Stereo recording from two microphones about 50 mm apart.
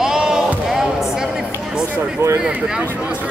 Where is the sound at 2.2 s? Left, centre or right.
Right.